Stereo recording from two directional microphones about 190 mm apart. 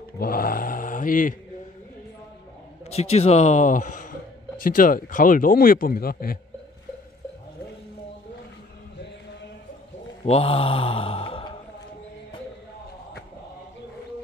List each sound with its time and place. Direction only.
0.2 s mantra: 50° left (ahead or behind)
2.9 s speech: 35° left (ahead or behind); by 6.4 s 50° left (ahead or behind)
10.2 s a sound: 30° left (ahead or behind)